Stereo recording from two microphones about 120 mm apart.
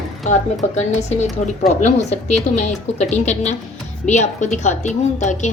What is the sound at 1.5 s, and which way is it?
A woman's voice, 80° left.